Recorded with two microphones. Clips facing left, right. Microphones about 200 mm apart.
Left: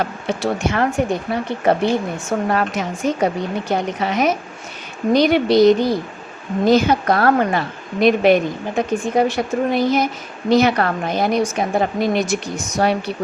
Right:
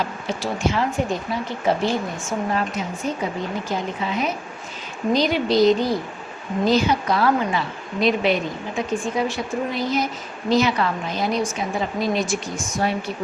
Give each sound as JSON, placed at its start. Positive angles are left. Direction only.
{"t": 0.0, "sound": "a woman's voice", "side_deg": 60}
{"t": 2.5, "sound": "a woman's voice", "side_deg": 80}
{"t": 5.1, "sound": "a woman's voice", "side_deg": 65}
{"t": 6.7, "sound": "a woman's voice", "side_deg": 55}